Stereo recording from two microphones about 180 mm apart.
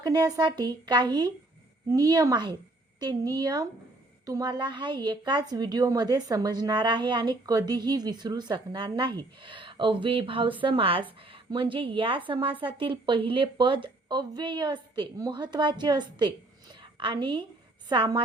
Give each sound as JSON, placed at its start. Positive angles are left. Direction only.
{"t": 0.0, "sound": "a woman's voice", "side_deg": -20}